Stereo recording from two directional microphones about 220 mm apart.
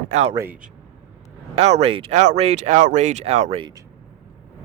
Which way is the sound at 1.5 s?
30° right (ahead or behind).